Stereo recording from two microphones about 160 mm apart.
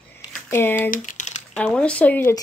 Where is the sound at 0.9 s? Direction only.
50° left (ahead or behind).